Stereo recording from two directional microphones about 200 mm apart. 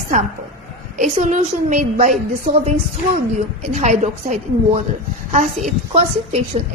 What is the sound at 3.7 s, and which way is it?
A woman's voice, 35° right (ahead or behind).